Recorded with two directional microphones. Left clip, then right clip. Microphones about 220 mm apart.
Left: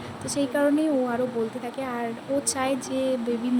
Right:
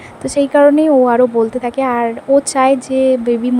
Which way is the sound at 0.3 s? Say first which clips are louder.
Right 14 dB; 40° right (ahead or behind).